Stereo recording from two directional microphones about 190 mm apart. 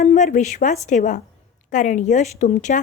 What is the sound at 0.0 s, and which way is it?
Speech, 40° left (ahead or behind).